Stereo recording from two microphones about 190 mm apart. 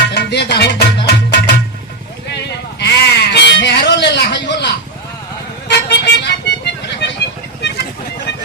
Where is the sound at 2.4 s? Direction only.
60° left (ahead or behind).